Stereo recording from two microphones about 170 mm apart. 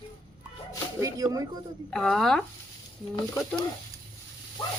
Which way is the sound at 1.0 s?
20° right (ahead or behind).